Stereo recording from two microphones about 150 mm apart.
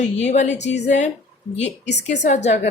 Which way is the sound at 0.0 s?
50° left (ahead or behind).